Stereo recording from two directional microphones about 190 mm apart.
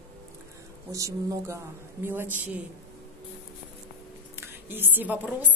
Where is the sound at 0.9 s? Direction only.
15° right (ahead or behind).